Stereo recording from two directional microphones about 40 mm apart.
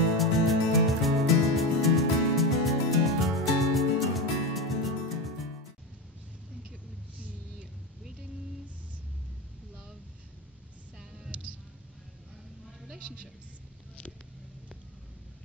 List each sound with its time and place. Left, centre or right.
0.2 s music: centre
13.0 s a woman's voice: right